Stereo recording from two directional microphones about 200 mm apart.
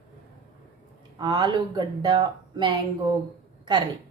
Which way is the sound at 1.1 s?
20° right (ahead or behind).